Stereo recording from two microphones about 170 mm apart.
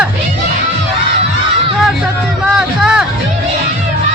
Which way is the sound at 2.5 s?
5° right (ahead or behind).